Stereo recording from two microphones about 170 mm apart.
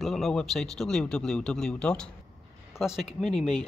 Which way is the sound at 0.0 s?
Centre (ahead or behind).